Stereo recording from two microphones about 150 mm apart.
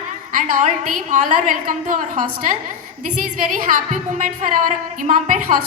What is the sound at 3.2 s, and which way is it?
Music, 65° right (ahead or behind).